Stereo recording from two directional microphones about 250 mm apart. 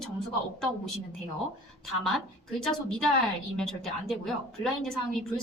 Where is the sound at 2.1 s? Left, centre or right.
Centre.